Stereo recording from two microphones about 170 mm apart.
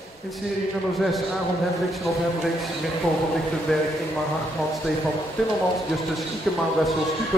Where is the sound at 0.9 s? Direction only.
Centre (ahead or behind).